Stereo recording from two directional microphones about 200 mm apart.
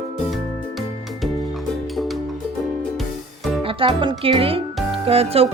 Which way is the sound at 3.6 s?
25° right (ahead or behind).